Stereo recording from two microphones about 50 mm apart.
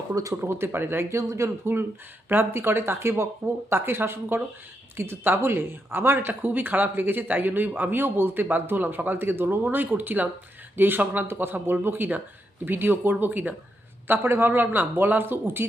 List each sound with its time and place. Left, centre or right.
0.1 s speech: right
0.4 s speech: right
1.1 s speech: right
2.3 s speech: right
14.1 s speech: right